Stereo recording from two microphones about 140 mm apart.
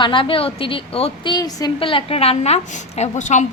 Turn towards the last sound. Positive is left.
turn(degrees=55)  # may be behind; listen again after turning